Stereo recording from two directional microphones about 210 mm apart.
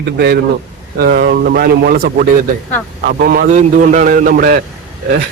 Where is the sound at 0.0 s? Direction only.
50° right (ahead or behind).